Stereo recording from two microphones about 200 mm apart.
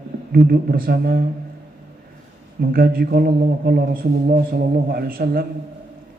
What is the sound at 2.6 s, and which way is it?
Speech, 45° right (ahead or behind).